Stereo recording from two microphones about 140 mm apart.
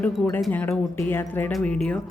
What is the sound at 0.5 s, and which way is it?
A woman's voice, 15° left (ahead or behind).